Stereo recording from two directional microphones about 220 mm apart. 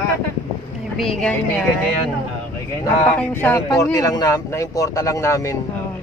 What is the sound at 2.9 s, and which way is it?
Speech, 10° left (ahead or behind).